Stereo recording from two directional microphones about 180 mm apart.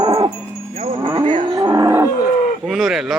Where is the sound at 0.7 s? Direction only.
35° right (ahead or behind).